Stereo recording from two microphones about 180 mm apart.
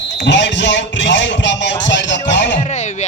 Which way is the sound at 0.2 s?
80° left.